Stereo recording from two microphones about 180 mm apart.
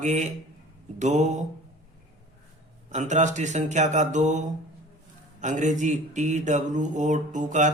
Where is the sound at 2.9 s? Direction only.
40° right (ahead or behind).